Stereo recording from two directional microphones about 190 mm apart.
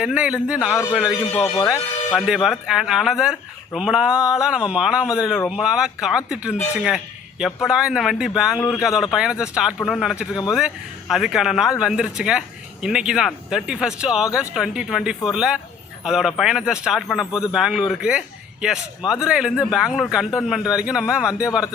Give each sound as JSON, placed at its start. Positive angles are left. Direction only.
{"t": 0.0, "sound": "speech", "side_deg": -5}
{"t": 1.2, "sound": "speech", "side_deg": 15}
{"t": 2.1, "sound": "speech", "side_deg": -5}
{"t": 8.5, "sound": "speech", "side_deg": 10}
{"t": 8.8, "sound": "speech", "side_deg": -5}